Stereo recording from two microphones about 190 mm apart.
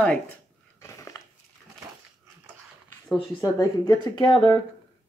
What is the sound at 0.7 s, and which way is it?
Crushing, 15° left (ahead or behind).